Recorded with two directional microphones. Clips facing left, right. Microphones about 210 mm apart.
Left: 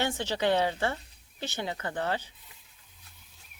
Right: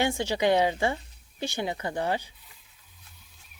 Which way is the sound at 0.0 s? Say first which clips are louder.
Right 3 dB; 15° right (ahead or behind).